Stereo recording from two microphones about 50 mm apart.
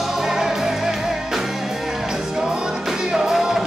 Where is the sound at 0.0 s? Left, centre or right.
Centre.